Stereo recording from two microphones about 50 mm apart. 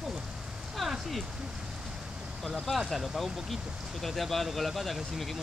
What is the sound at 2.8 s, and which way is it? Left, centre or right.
Speech, centre.